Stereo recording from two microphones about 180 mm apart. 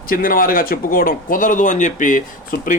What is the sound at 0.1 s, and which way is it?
Speech, 50° left (ahead or behind).